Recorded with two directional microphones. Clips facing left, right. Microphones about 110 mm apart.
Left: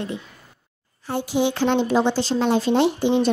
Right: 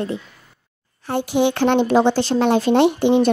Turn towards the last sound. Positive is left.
turn(degrees=-60)  # may be behind; listen again after turning